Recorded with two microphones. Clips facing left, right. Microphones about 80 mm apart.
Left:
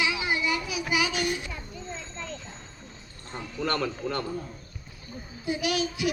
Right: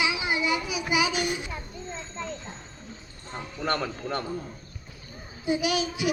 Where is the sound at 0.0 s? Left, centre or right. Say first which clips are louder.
Right 1 dB; centre.